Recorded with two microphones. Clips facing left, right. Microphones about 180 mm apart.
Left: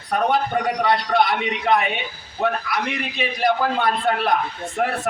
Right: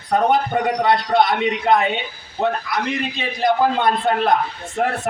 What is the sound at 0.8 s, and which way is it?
Speech, 25° right (ahead or behind).